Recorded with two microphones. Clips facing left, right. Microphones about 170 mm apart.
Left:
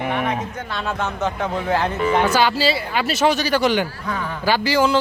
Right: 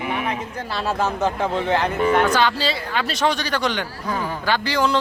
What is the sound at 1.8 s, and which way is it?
A man's voice, 10° left (ahead or behind).